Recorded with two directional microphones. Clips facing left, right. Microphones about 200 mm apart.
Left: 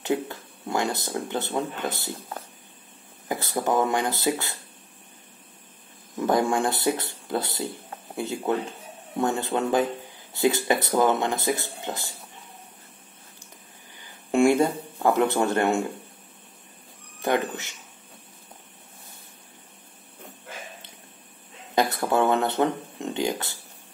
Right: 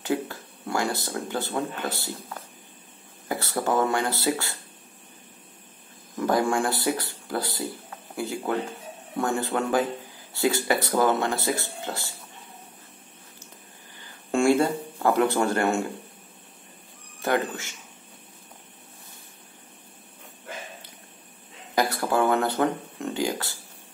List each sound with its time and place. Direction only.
0.0 s speech: 20° left (ahead or behind)
3.3 s speech: 20° left (ahead or behind)
6.1 s speech: 20° left (ahead or behind)
14.3 s speech: 15° left (ahead or behind)
17.2 s speech: 20° left (ahead or behind)
21.7 s speech: 20° left (ahead or behind)